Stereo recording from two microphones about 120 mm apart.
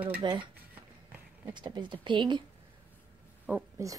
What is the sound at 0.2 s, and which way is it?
Speech, 40° right (ahead or behind).